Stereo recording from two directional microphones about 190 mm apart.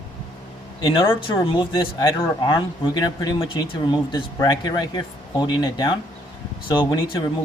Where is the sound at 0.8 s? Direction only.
25° left (ahead or behind).